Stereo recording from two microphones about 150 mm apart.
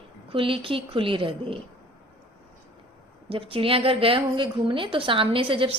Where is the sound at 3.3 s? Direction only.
40° right (ahead or behind).